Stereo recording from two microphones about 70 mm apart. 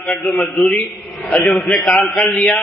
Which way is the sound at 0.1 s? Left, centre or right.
Centre.